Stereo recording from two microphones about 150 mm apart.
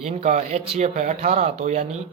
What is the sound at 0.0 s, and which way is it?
Speech, 50° right (ahead or behind).